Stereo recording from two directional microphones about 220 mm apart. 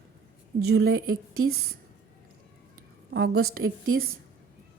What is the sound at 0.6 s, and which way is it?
Speech, 50° right (ahead or behind).